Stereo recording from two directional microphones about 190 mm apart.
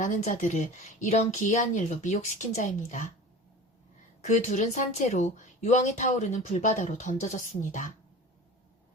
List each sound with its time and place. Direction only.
0.0 s speech: 45° left (ahead or behind)
4.2 s speech: 40° left (ahead or behind)